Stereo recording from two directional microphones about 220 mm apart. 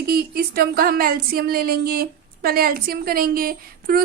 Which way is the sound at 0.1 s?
45° right (ahead or behind).